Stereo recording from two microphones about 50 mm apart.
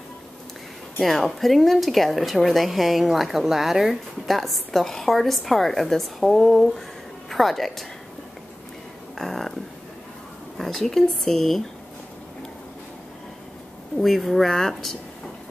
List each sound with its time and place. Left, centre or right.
1.0 s a woman's voice: centre
9.2 s a sound: centre
10.6 s a woman's voice: centre
14.0 s a woman's voice: centre